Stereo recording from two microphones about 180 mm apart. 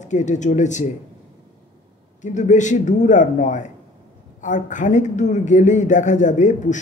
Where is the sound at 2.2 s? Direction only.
45° left (ahead or behind).